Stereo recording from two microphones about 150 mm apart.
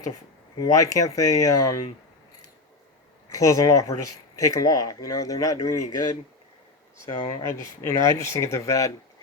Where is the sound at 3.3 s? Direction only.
20° left (ahead or behind).